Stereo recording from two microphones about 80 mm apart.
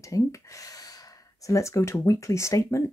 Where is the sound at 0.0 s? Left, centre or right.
Left.